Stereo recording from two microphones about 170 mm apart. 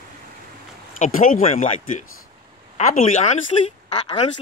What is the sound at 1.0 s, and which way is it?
Speech, 55° left (ahead or behind).